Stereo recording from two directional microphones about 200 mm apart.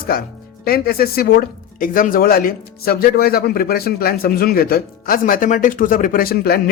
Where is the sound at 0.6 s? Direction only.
50° left (ahead or behind).